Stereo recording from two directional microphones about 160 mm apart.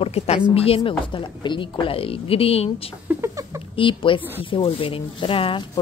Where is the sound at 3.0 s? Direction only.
20° right (ahead or behind).